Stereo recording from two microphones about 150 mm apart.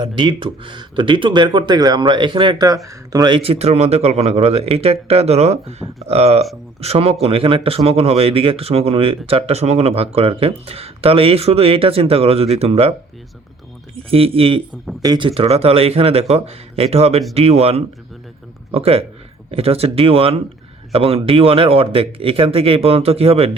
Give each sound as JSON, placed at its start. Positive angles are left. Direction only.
{"t": 0.0, "sound": "speech", "side_deg": -35}
{"t": 14.1, "sound": "speech", "side_deg": -40}
{"t": 15.0, "sound": "speech", "side_deg": -25}
{"t": 15.3, "sound": "speech", "side_deg": -40}